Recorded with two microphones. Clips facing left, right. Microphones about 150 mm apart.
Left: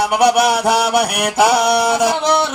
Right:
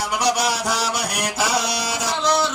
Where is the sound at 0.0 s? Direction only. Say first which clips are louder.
Left 8 dB; 60° left (ahead or behind).